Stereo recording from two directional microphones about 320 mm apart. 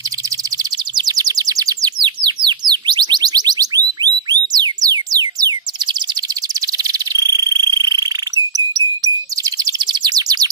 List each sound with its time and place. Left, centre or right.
0.9 s bird: centre
6.8 s cricket: centre
8.5 s chirp: centre